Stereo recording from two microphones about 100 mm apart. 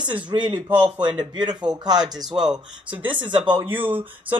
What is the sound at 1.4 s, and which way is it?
Speech, 45° right (ahead or behind).